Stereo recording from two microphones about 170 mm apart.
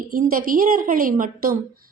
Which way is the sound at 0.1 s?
55° right (ahead or behind).